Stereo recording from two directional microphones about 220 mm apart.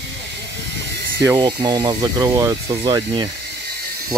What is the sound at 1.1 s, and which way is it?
Speech, 15° right (ahead or behind).